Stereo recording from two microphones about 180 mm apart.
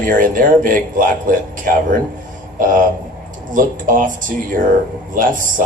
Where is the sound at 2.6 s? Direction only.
50° right (ahead or behind).